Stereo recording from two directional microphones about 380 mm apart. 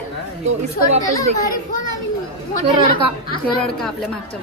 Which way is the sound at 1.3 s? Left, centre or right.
Centre.